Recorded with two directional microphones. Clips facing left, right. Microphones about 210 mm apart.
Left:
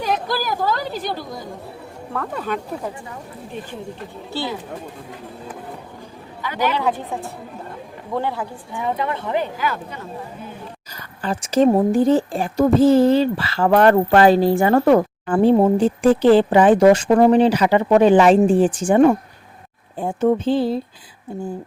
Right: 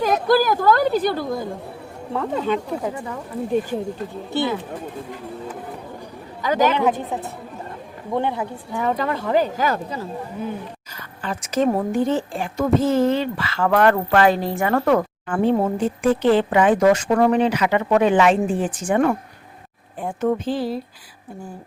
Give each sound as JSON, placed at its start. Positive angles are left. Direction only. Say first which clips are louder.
{"t": 0.0, "sound": "a woman's voice", "louder": "right 6 dB", "side_deg": -50}
{"t": 2.1, "sound": "speech", "louder": "right 4 dB", "side_deg": -20}
{"t": 4.3, "sound": "speech", "louder": "right 4 dB", "side_deg": -20}
{"t": 6.4, "sound": "speech", "louder": "right 5 dB", "side_deg": -45}
{"t": 6.7, "sound": "speech", "louder": "right 2 dB", "side_deg": -20}
{"t": 8.7, "sound": "speech", "louder": "right 1 dB", "side_deg": -40}
{"t": 11.2, "sound": "speech", "louder": "left 5 dB", "side_deg": 35}